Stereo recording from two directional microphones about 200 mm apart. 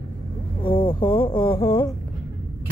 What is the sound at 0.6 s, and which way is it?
Speech, 25° left (ahead or behind).